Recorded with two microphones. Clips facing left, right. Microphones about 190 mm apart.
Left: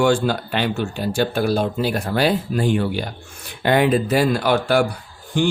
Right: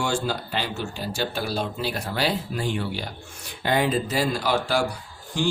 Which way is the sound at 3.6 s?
65° left (ahead or behind).